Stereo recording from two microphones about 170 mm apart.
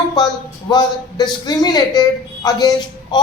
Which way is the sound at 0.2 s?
25° left (ahead or behind).